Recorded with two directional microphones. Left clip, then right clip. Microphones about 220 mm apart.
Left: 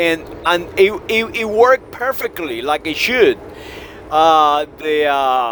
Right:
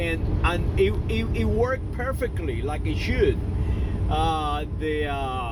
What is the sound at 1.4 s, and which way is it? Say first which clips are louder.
Speech: left 13 dB; 50° left (ahead or behind).